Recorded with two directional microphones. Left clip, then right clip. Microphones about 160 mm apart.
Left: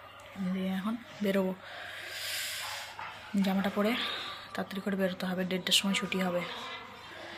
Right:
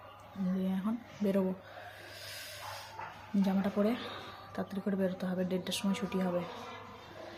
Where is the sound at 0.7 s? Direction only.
5° right (ahead or behind).